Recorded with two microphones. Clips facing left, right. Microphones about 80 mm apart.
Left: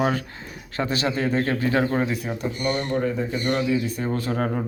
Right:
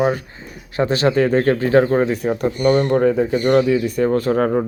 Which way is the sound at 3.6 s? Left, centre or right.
Right.